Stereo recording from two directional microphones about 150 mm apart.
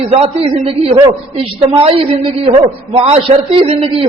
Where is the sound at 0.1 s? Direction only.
40° right (ahead or behind).